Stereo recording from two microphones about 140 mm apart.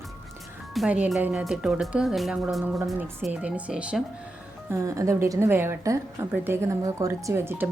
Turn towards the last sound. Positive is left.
turn(degrees=-15)  # may be behind; listen again after turning